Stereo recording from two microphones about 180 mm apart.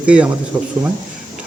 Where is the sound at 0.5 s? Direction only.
20° right (ahead or behind).